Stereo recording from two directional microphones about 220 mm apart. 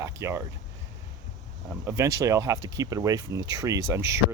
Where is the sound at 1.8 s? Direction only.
15° right (ahead or behind).